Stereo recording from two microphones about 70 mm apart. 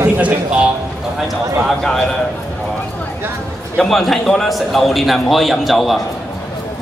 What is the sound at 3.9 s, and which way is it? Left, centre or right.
A woman's voice, centre.